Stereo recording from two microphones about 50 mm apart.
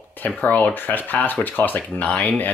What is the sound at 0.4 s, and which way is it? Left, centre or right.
Speech, left.